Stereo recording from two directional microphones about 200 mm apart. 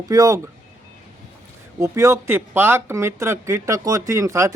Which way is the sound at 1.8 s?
15° right (ahead or behind).